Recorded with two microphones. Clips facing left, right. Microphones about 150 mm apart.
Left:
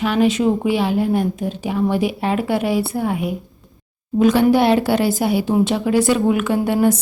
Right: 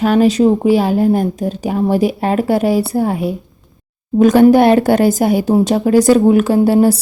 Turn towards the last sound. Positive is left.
turn(degrees=-35)  # may be behind; listen again after turning